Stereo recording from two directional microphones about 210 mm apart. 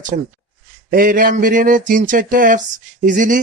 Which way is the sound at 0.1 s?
40° right (ahead or behind).